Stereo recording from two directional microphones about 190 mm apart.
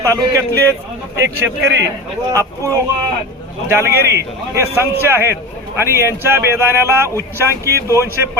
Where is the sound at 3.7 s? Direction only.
15° right (ahead or behind).